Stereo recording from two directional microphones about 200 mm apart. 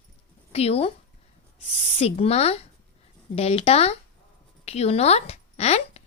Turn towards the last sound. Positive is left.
turn(degrees=30)  # may be behind; listen again after turning